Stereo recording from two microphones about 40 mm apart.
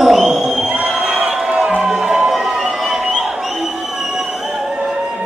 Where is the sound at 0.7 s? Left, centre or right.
Right.